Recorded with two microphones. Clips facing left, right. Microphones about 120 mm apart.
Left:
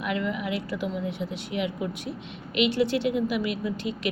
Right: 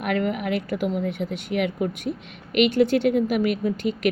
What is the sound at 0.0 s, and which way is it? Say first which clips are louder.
Speech: right 4 dB; 55° right (ahead or behind).